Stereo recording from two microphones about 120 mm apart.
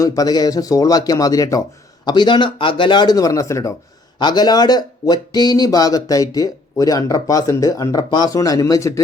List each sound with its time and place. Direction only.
0.0 s speech: 30° left (ahead or behind)
2.0 s speech: 40° left (ahead or behind)
4.2 s speech: 35° left (ahead or behind)